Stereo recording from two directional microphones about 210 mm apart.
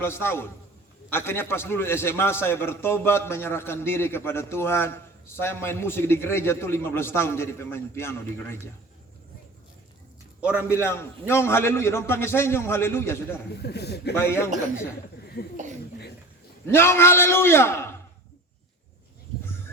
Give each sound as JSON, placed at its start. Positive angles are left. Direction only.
{"t": 0.0, "sound": "a man's voice", "side_deg": 10}
{"t": 10.7, "sound": "a man's voice", "side_deg": 10}
{"t": 13.6, "sound": "a man's voice", "side_deg": 50}
{"t": 14.2, "sound": "a man's voice", "side_deg": 10}
{"t": 16.6, "sound": "a man's voice", "side_deg": 10}